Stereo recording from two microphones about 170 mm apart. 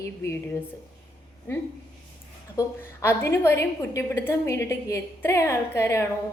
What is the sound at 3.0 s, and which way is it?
A woman's voice, 15° left (ahead or behind).